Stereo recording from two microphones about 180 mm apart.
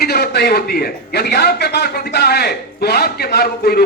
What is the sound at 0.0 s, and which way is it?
A man's voice, 65° left (ahead or behind).